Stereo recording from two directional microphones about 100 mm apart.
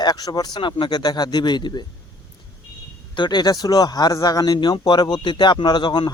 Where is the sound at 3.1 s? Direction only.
50° left (ahead or behind).